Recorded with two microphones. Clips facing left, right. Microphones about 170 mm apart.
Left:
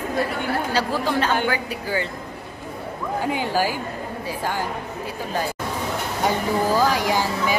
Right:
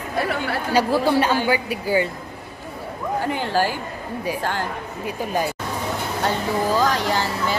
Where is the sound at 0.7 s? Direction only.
10° right (ahead or behind).